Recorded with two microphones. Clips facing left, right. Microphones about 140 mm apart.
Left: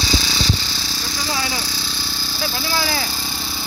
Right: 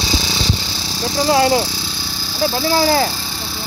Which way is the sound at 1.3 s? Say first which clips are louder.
Right 13 dB; 55° right (ahead or behind).